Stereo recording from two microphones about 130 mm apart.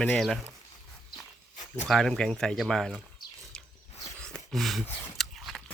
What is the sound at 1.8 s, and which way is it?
Speech, centre (ahead or behind).